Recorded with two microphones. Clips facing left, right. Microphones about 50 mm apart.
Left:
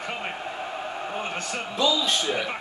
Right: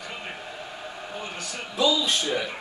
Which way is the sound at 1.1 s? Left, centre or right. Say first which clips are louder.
Left 3 dB; left.